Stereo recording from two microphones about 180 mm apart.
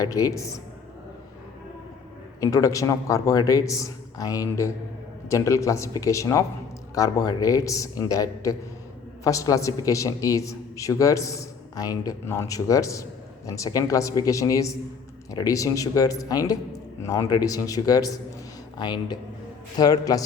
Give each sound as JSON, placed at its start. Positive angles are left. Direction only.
{"t": 0.0, "sound": "a man's voice", "side_deg": 20}
{"t": 2.4, "sound": "a man's voice", "side_deg": 20}